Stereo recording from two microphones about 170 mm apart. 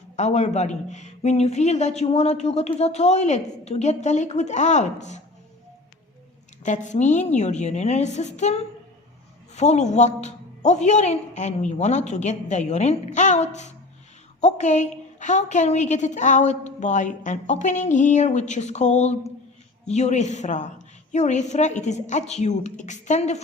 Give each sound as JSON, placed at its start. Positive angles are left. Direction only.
{"t": 0.2, "sound": "speech", "side_deg": 40}
{"t": 6.6, "sound": "a woman's voice", "side_deg": 45}